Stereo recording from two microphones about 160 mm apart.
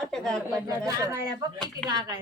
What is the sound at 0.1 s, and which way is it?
Speech, 5° left (ahead or behind).